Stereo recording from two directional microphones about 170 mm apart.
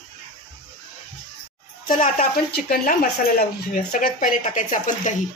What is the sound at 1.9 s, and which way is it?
Speech, 50° left (ahead or behind).